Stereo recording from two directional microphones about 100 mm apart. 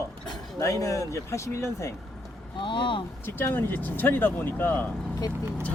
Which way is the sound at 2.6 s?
55° left (ahead or behind).